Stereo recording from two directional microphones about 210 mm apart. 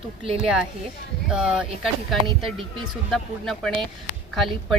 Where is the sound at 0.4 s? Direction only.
5° right (ahead or behind).